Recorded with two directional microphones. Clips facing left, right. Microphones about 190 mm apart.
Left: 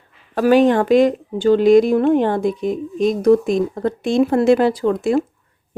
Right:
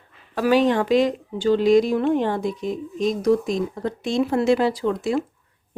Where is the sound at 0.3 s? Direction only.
50° left (ahead or behind).